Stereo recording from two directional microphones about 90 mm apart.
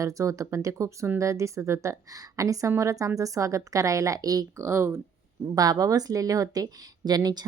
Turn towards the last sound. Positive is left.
turn(degrees=-50)  # may be behind; listen again after turning